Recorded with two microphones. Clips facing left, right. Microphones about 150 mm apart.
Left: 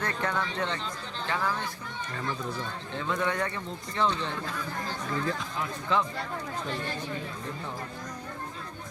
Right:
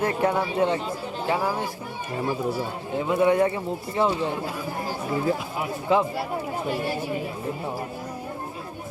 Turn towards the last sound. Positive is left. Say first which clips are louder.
# right 7 dB
turn(degrees=-10)  # may be behind; listen again after turning